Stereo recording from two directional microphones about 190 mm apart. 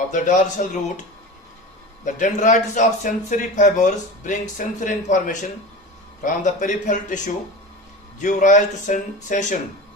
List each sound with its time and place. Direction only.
0.1 s a man's voice: 40° left (ahead or behind)
2.0 s a man's voice: 40° left (ahead or behind)
8.2 s a man's voice: 40° left (ahead or behind)